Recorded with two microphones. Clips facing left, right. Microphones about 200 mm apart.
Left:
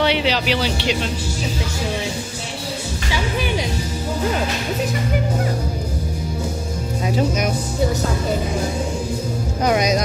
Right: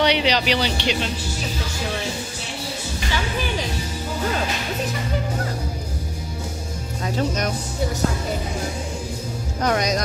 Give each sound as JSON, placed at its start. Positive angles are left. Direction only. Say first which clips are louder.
{"t": 0.0, "sound": "speech", "louder": "left 1 dB", "side_deg": 5}
{"t": 7.2, "sound": "speech", "louder": "left 3 dB", "side_deg": 5}
{"t": 9.6, "sound": "speech", "louder": "left 3 dB", "side_deg": 5}